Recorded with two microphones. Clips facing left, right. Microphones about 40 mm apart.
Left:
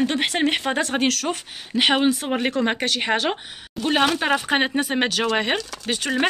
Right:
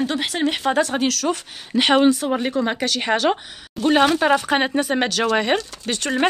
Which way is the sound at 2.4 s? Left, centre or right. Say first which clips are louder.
Even; left.